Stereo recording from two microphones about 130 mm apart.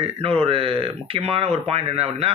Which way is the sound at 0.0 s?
50° right (ahead or behind).